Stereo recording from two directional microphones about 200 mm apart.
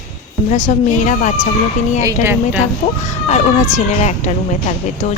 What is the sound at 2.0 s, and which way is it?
Speech, 15° right (ahead or behind).